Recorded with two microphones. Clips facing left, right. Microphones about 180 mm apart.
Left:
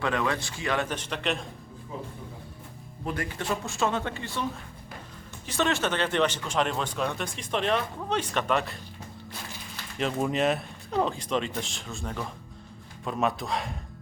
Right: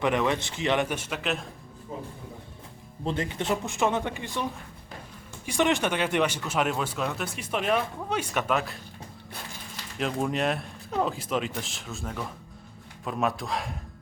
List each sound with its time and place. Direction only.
0.0 s speech: 20° right (ahead or behind)
0.9 s speech: 10° right (ahead or behind)
3.0 s speech: 25° right (ahead or behind)
5.5 s speech: 15° right (ahead or behind)
10.0 s speech: centre (ahead or behind)